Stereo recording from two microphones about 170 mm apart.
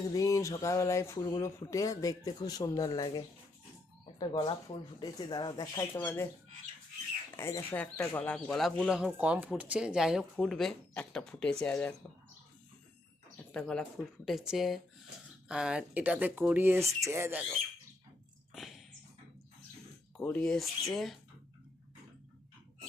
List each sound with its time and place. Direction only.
0.1 s speech: 20° left (ahead or behind)
7.3 s speech: 15° left (ahead or behind)
13.3 s dog: 5° left (ahead or behind)
14.3 s speech: centre (ahead or behind)
18.5 s a sound: centre (ahead or behind)
20.1 s speech: 5° left (ahead or behind)